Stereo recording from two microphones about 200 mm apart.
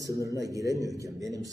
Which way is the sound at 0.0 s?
15° right (ahead or behind).